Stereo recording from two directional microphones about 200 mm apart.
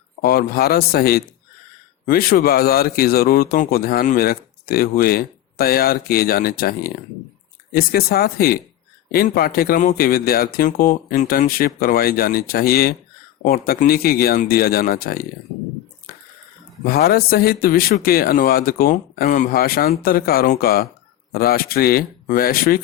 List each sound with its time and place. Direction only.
0.2 s speech: 50° left (ahead or behind)
16.8 s speech: 50° left (ahead or behind)